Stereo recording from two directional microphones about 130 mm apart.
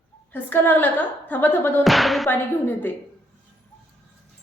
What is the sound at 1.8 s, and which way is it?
Speech, centre (ahead or behind).